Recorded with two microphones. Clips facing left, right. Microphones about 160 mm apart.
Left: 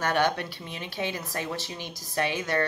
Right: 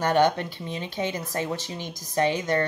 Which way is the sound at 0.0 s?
20° right (ahead or behind).